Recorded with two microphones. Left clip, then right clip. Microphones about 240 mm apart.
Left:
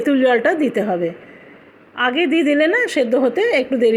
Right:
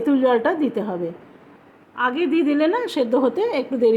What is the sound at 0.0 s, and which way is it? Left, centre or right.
Speech, centre.